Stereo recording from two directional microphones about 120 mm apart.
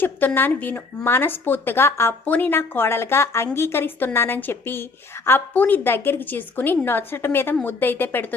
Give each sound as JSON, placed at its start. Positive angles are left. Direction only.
{"t": 0.0, "sound": "speech", "side_deg": 15}